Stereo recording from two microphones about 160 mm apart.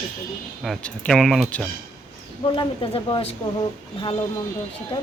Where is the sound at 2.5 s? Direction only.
30° left (ahead or behind).